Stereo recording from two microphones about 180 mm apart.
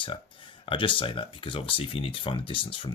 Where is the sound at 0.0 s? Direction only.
30° left (ahead or behind).